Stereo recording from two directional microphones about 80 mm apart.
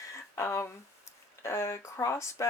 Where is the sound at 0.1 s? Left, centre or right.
Left.